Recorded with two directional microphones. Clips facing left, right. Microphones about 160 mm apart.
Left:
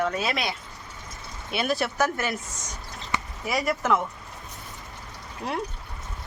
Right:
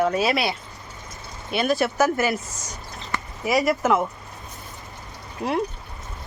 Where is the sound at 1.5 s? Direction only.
Centre (ahead or behind).